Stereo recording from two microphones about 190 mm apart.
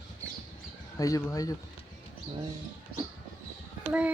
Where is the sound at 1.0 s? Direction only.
20° left (ahead or behind).